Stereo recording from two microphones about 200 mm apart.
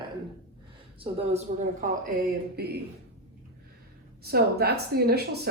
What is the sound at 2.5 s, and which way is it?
Speech, 50° right (ahead or behind).